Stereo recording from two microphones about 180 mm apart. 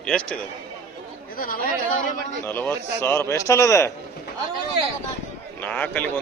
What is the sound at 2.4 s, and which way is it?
A man's voice, 10° left (ahead or behind).